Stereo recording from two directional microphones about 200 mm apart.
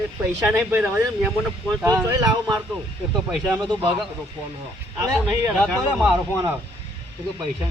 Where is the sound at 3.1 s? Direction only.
Centre (ahead or behind).